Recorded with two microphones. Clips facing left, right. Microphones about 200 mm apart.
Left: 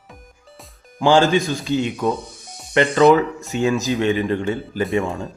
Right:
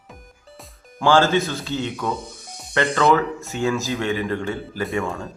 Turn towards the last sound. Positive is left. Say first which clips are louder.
# left 4 dB
turn(degrees=20)  # may be behind; listen again after turning